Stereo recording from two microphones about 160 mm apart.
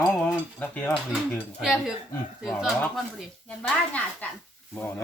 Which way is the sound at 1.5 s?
Centre (ahead or behind).